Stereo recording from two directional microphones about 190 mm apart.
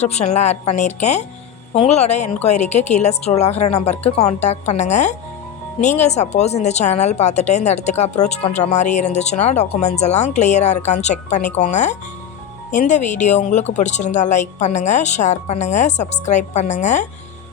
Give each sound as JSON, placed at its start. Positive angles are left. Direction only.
{"t": 0.0, "sound": "a woman's voice", "side_deg": 35}